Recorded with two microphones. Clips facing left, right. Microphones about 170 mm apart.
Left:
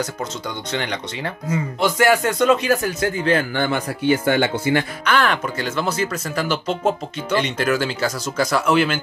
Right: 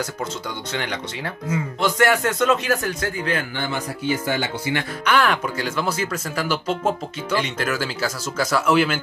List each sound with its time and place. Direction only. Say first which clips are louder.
0.7 s speech: left 3 dB; 5° right (ahead or behind)
3.0 s speech: left 5 dB; 30° left (ahead or behind)
3.5 s speech: left 5 dB; 55° left (ahead or behind)
5.0 s speech: even; 10° right (ahead or behind)